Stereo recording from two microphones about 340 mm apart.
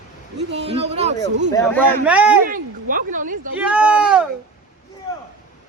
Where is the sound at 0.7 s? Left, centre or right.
Centre.